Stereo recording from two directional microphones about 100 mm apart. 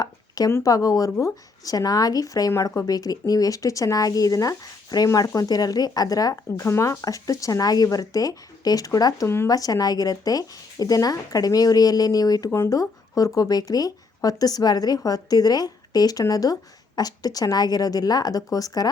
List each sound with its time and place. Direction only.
0.0 s a sound: 35° left (ahead or behind)
0.5 s speech: 35° left (ahead or behind)
9.2 s speech: 25° left (ahead or behind)
9.5 s speech: 35° left (ahead or behind)
12.5 s speech: 25° left (ahead or behind)